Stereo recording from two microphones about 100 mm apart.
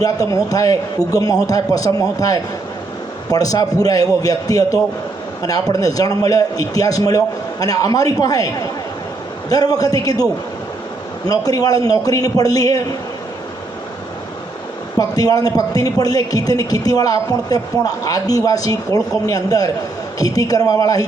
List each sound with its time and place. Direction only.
0.0 s a man's voice: 35° left (ahead or behind)
11.3 s a man's voice: 40° left (ahead or behind)
14.9 s a man's voice: 40° left (ahead or behind)